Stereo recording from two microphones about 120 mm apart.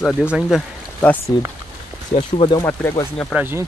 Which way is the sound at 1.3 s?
35° left (ahead or behind).